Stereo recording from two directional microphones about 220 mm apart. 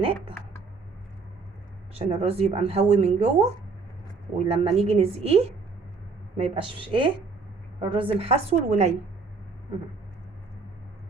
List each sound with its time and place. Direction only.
0.0 s speech: 25° right (ahead or behind)
2.0 s speech: 25° right (ahead or behind)